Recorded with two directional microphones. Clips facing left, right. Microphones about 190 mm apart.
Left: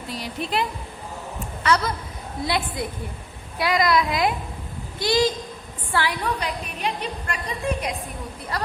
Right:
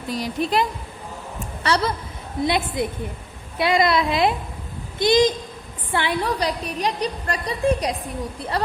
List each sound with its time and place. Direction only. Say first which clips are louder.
0.1 s a woman's voice: right 5 dB; 45° right (ahead or behind)
1.6 s a woman's voice: even; 30° right (ahead or behind)
2.4 s speech: right 4 dB; 20° right (ahead or behind)
6.2 s a woman's voice: right 4 dB; 35° right (ahead or behind)